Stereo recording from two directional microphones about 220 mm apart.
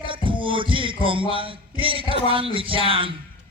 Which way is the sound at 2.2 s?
25° right (ahead or behind).